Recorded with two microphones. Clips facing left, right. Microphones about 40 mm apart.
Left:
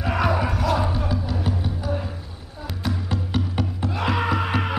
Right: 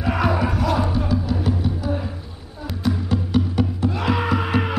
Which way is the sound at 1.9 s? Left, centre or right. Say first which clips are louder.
Right 2 dB; centre.